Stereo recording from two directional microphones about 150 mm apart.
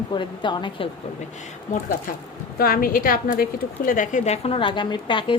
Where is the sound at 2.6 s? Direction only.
75° left (ahead or behind).